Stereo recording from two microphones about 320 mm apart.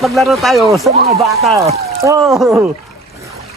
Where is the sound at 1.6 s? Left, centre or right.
Centre.